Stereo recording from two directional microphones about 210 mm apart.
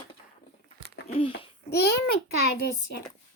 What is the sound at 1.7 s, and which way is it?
A child's voice, 50° left (ahead or behind).